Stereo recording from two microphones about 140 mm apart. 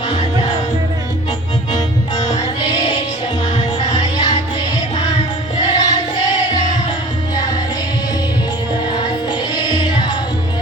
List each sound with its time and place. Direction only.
1.7 s music: 30° left (ahead or behind)
7.3 s music: 30° left (ahead or behind)
8.9 s music: 30° left (ahead or behind)